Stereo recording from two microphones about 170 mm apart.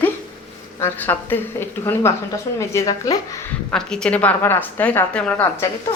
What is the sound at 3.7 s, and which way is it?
A woman's voice, 5° left (ahead or behind).